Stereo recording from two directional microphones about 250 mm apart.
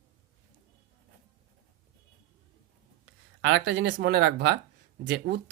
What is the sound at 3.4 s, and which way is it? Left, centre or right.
Speech, right.